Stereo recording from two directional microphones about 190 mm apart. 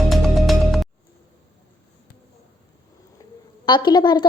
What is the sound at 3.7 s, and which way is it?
Speech, 25° left (ahead or behind).